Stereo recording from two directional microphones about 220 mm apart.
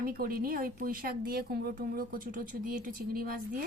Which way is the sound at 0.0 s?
40° right (ahead or behind).